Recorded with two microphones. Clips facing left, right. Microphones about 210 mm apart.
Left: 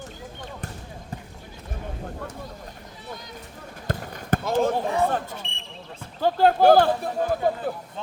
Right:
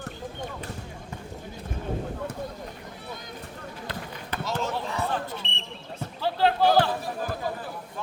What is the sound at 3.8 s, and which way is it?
Basketball bounce, 45° left (ahead or behind).